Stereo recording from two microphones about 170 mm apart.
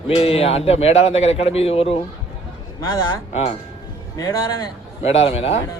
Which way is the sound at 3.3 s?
40° left (ahead or behind).